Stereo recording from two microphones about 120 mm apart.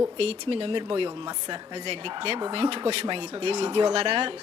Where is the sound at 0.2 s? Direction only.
55° right (ahead or behind).